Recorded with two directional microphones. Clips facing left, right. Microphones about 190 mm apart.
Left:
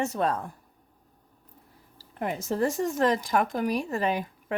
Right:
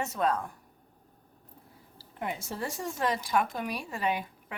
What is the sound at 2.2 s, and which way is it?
Speech, 40° left (ahead or behind).